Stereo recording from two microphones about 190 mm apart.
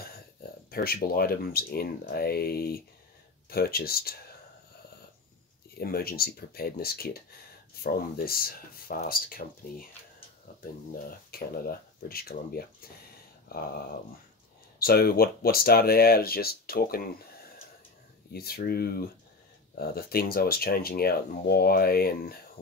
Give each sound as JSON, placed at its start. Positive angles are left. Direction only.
{"t": 0.7, "sound": "speech", "side_deg": 50}
{"t": 5.8, "sound": "speech", "side_deg": 50}
{"t": 14.8, "sound": "speech", "side_deg": 55}